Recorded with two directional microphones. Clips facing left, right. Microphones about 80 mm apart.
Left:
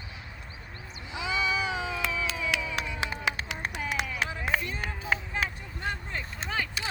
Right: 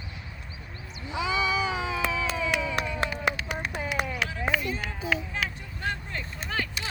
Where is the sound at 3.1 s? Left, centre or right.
Left.